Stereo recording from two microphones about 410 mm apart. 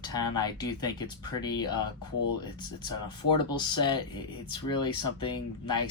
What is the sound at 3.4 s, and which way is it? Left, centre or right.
Speech, centre.